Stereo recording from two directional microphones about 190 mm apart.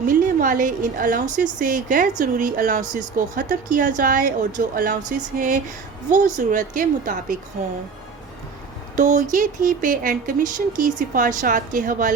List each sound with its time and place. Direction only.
0.0 s speech: 45° right (ahead or behind)
9.0 s speech: 40° right (ahead or behind)